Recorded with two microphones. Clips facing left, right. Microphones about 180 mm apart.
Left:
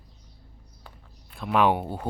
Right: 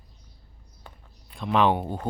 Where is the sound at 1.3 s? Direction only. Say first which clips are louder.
Even; 5° left (ahead or behind).